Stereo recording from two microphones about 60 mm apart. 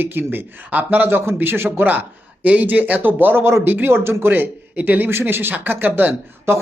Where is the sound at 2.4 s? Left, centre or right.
Right.